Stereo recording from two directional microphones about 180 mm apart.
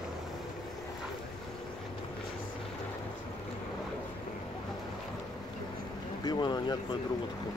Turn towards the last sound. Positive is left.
turn(degrees=25)  # may be behind; listen again after turning